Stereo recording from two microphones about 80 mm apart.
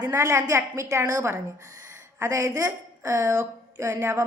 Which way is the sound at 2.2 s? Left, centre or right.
Right.